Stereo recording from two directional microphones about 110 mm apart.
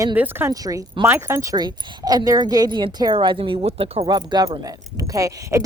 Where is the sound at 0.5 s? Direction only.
35° right (ahead or behind).